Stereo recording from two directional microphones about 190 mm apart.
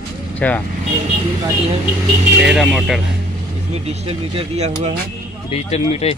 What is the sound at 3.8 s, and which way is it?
A man's voice, 30° right (ahead or behind).